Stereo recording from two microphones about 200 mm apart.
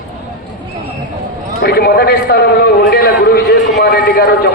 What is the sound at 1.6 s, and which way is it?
A man's voice, 50° left (ahead or behind).